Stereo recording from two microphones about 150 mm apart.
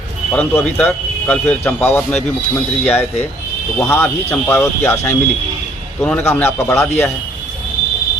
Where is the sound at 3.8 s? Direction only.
15° left (ahead or behind).